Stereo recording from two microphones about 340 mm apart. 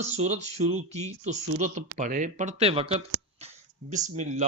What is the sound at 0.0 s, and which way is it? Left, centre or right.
Speech, centre.